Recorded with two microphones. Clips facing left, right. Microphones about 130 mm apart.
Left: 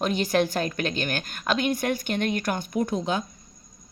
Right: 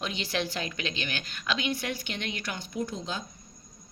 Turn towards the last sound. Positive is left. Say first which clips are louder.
# left 8 dB
turn(degrees=60)  # may be behind; listen again after turning